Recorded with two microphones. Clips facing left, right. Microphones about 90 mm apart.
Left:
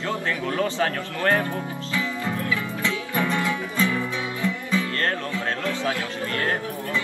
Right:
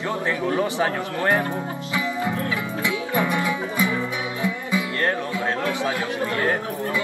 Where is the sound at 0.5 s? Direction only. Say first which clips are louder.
Right 1 dB; 20° right (ahead or behind).